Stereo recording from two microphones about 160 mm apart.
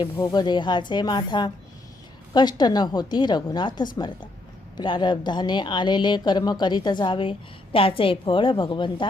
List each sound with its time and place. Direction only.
0.2 s a woman's voice: 25° left (ahead or behind)